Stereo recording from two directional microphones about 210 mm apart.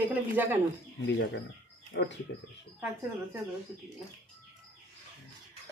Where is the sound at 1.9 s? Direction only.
55° left (ahead or behind).